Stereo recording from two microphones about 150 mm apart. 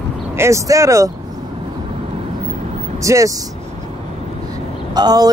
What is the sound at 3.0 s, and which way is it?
Speech, 20° right (ahead or behind).